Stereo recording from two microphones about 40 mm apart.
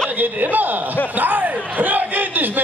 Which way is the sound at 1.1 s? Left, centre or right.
Right.